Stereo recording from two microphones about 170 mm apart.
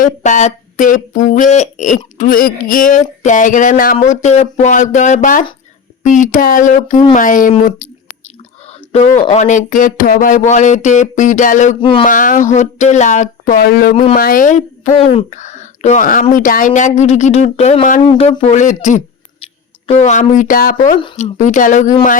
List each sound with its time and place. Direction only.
0.0 s speech: 45° left (ahead or behind)
2.1 s speech: 55° left (ahead or behind)
7.8 s a sound: 55° left (ahead or behind)
9.3 s speech: 45° left (ahead or behind)
11.8 s speech: 30° left (ahead or behind)
12.0 s speech: 50° left (ahead or behind)
13.9 s speech: 35° left (ahead or behind)
14.2 s speech: 55° left (ahead or behind)
18.0 s speech: 30° left (ahead or behind); by 21.9 s 50° left (ahead or behind)